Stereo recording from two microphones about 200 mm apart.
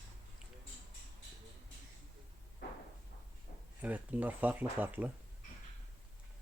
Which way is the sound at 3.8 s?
10° right (ahead or behind).